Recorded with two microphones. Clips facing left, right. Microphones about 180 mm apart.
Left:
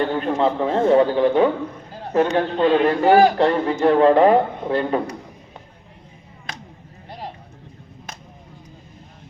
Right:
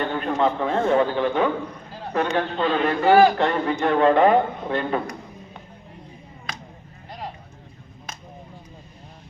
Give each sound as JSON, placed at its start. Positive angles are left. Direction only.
{"t": 0.0, "sound": "a man's voice", "side_deg": 30}
{"t": 2.6, "sound": "a man's voice", "side_deg": 15}
{"t": 3.3, "sound": "a man's voice", "side_deg": 35}